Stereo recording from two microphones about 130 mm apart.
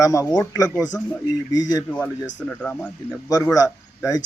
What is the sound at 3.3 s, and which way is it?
Speech, 25° left (ahead or behind).